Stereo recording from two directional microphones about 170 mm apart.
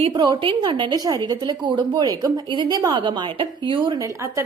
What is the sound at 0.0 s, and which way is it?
A woman's voice, 25° right (ahead or behind).